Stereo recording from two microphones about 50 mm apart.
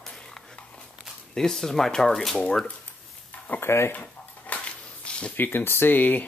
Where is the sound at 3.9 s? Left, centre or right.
Left.